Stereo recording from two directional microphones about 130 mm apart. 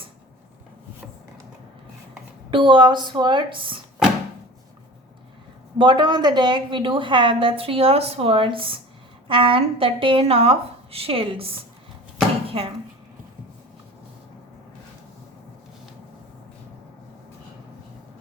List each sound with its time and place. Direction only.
2.5 s a woman's voice: 40° right (ahead or behind)
5.7 s a woman's voice: 35° right (ahead or behind)